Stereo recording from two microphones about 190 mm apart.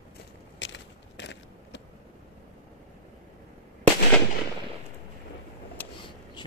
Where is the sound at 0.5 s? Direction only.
70° left (ahead or behind).